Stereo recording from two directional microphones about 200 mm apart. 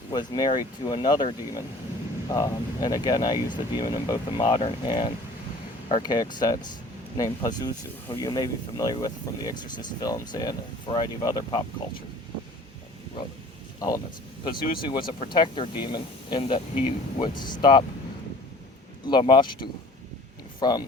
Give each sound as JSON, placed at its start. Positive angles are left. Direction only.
{"t": 0.1, "sound": "speech", "side_deg": 20}
{"t": 13.7, "sound": "speech", "side_deg": 15}
{"t": 19.0, "sound": "speech", "side_deg": 25}